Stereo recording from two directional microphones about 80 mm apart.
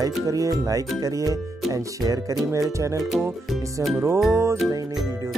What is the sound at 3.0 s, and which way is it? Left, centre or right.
Speech, centre.